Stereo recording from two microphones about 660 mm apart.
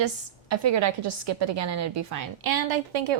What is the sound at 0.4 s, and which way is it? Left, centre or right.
A woman's voice, right.